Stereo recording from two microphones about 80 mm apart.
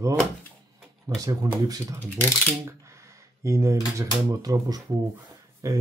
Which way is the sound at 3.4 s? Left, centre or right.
Right.